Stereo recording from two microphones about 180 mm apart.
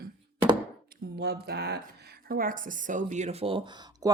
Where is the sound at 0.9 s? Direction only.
60° right (ahead or behind).